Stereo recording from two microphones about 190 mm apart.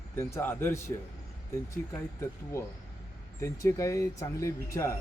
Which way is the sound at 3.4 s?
15° left (ahead or behind).